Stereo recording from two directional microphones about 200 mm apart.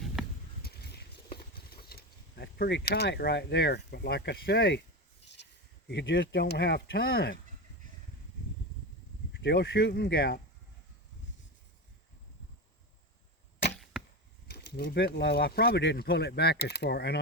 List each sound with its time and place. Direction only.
0.6 s mechanisms: 55° left (ahead or behind)
5.9 s speech: 60° left (ahead or behind)
9.3 s speech: 60° left (ahead or behind)
14.4 s speech: 55° left (ahead or behind)